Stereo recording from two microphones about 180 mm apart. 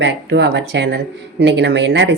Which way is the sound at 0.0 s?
75° right (ahead or behind).